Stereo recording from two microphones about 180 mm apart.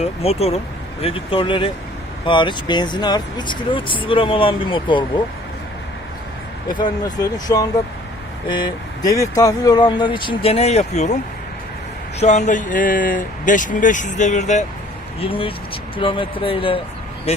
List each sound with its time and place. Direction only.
0.0 s speech: 35° left (ahead or behind)
6.7 s speech: 25° left (ahead or behind)
12.2 s speech: 40° left (ahead or behind)
15.2 s speech: 30° left (ahead or behind)